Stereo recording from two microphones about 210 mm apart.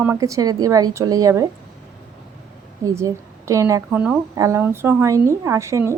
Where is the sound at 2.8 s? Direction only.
15° right (ahead or behind).